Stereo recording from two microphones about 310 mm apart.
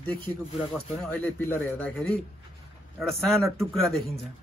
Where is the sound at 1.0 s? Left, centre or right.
Centre.